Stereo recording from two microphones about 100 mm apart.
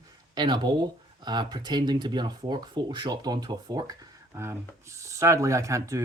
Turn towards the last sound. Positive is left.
turn(degrees=-30)  # may be behind; listen again after turning